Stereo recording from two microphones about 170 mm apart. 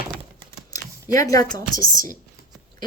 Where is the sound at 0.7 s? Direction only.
20° left (ahead or behind).